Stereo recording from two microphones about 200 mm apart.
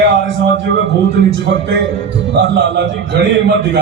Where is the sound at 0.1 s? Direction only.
65° right (ahead or behind).